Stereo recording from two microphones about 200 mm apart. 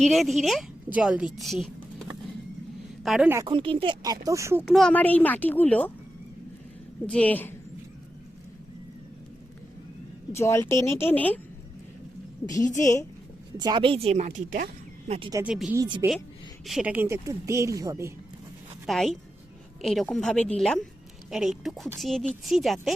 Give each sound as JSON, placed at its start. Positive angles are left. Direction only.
{"t": 0.0, "sound": "a woman's voice", "side_deg": 0}
{"t": 3.4, "sound": "speech", "side_deg": -25}
{"t": 4.6, "sound": "speech", "side_deg": 0}
{"t": 7.1, "sound": "speech", "side_deg": 5}
{"t": 10.3, "sound": "speech", "side_deg": 15}
{"t": 12.6, "sound": "a woman's voice", "side_deg": 40}
{"t": 13.6, "sound": "speech", "side_deg": -20}
{"t": 15.4, "sound": "a woman's voice", "side_deg": 0}
{"t": 15.7, "sound": "speech", "side_deg": -15}
{"t": 16.6, "sound": "speech", "side_deg": -5}
{"t": 18.9, "sound": "a woman's voice", "side_deg": 0}